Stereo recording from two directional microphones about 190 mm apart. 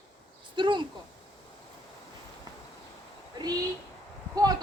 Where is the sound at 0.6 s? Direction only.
25° right (ahead or behind).